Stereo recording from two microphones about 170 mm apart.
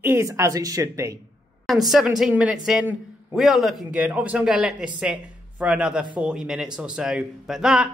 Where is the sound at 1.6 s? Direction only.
Centre (ahead or behind).